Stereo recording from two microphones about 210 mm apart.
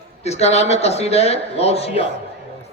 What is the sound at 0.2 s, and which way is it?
A man's voice, 30° left (ahead or behind).